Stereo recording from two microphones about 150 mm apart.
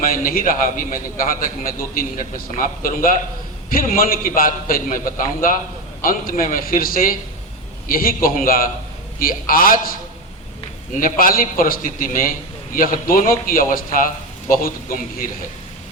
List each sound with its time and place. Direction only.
0.0 s a man's voice: 75° left (ahead or behind)
10.9 s a man's voice: 70° left (ahead or behind)